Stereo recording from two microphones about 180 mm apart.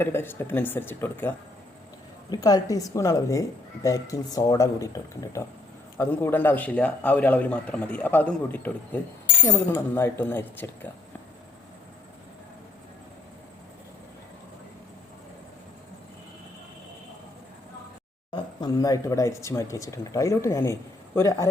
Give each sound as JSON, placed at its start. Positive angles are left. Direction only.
{"t": 0.0, "sound": "a man's voice", "side_deg": 10}
{"t": 2.3, "sound": "speech", "side_deg": 20}
{"t": 6.0, "sound": "a man's voice", "side_deg": 15}
{"t": 18.3, "sound": "a man's voice", "side_deg": 20}